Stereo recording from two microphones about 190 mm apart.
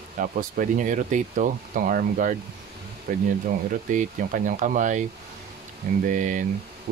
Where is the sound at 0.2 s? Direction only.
45° right (ahead or behind).